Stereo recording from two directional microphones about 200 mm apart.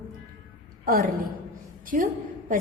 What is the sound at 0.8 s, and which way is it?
Speech, 45° right (ahead or behind).